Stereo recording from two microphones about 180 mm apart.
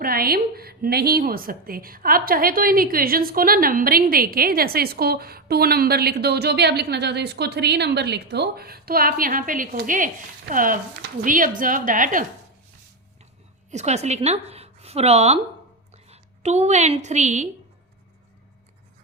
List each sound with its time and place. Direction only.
0.0 s a woman's voice: 55° right (ahead or behind)
13.7 s a woman's voice: 40° right (ahead or behind)